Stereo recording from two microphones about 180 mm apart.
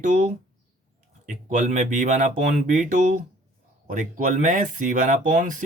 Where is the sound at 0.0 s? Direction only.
45° right (ahead or behind).